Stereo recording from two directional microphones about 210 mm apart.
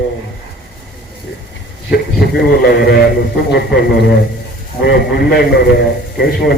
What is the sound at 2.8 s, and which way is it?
Speech, 50° left (ahead or behind).